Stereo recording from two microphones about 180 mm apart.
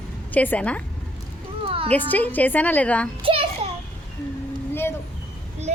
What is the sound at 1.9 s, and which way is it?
Speech, 10° left (ahead or behind).